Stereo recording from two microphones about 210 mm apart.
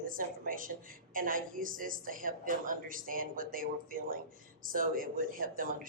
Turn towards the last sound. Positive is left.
turn(degrees=-40)  # may be behind; listen again after turning